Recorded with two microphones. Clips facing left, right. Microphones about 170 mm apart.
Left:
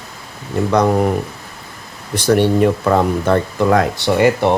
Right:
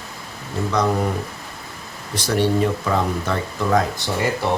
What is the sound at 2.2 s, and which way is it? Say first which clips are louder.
Speech: left 6 dB; 60° left (ahead or behind).